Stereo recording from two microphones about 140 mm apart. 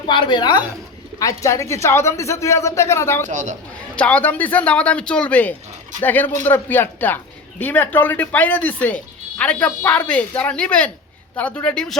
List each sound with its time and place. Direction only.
0.1 s a woman's voice: 35° left (ahead or behind); by 3.2 s 20° left (ahead or behind)
3.2 s speech: 60° right (ahead or behind)
3.9 s speech: 10° left (ahead or behind)